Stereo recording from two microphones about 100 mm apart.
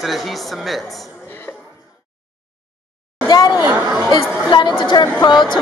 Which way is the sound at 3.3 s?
40° left (ahead or behind).